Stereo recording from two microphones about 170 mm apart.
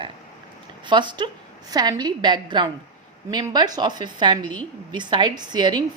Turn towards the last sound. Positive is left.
turn(degrees=-25)  # may be behind; listen again after turning